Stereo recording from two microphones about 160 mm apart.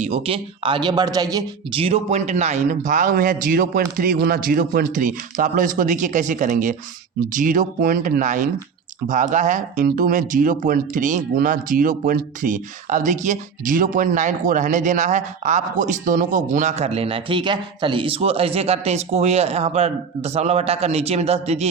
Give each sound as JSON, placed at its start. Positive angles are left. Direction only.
{"t": 0.0, "sound": "speech", "side_deg": -40}
{"t": 1.8, "sound": "a man's voice", "side_deg": -40}